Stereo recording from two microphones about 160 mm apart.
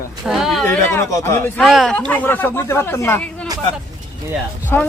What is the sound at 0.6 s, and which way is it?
Speech, 15° left (ahead or behind).